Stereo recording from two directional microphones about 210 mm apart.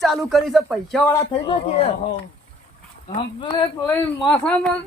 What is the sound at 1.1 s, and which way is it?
Speech, 20° left (ahead or behind).